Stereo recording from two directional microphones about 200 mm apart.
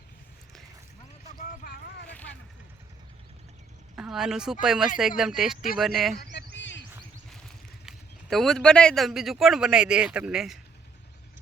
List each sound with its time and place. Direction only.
1.4 s boat: 50° left (ahead or behind)
3.9 s a woman's voice: 5° right (ahead or behind)
6.3 s a sound: 65° left (ahead or behind)
7.9 s speech: centre (ahead or behind)